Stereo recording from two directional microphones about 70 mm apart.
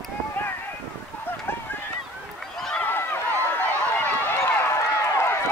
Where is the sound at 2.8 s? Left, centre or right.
Left.